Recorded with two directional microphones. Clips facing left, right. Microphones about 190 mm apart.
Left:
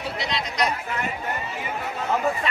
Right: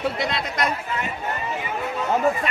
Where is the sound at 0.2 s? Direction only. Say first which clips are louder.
Right 1 dB; 50° right (ahead or behind).